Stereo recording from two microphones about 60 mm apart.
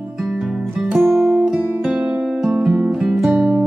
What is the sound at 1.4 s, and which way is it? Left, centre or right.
Music, centre.